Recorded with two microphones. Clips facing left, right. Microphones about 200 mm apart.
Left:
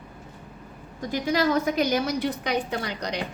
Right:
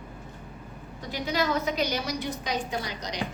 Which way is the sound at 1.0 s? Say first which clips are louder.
Left 5 dB; 45° left (ahead or behind).